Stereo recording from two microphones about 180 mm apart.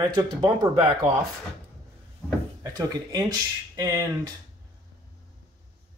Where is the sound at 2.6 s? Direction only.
20° right (ahead or behind).